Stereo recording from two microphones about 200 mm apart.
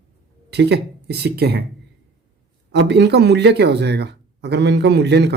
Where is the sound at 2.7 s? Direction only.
60° right (ahead or behind).